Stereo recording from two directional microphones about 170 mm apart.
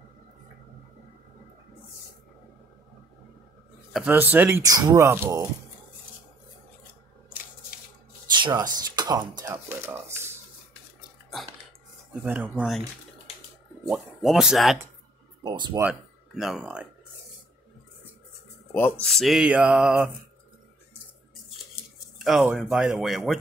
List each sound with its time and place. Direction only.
3.9 s speech: 10° right (ahead or behind)
8.3 s speech: 25° right (ahead or behind)
12.1 s speech: 10° right (ahead or behind)
13.8 s speech: centre (ahead or behind)
15.4 s speech: 25° right (ahead or behind)
15.8 s speech: 5° right (ahead or behind)
18.7 s speech: 10° left (ahead or behind); by 20.1 s 5° right (ahead or behind)
22.2 s speech: 5° right (ahead or behind)